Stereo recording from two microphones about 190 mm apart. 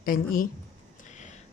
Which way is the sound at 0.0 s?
45° left (ahead or behind).